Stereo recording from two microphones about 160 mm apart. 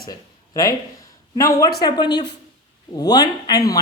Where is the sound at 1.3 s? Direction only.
20° left (ahead or behind).